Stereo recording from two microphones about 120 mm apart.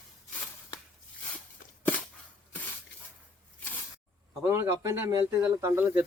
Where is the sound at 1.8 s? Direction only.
10° left (ahead or behind).